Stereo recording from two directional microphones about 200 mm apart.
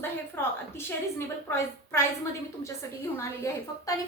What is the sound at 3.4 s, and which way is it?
Speech, 15° left (ahead or behind).